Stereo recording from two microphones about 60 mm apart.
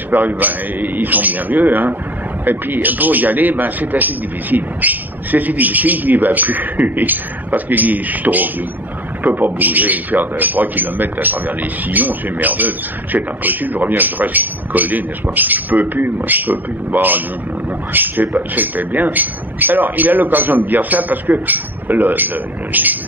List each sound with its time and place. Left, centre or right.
0.1 s speech: right